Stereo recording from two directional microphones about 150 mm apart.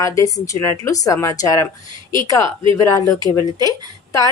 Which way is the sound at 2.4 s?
35° right (ahead or behind).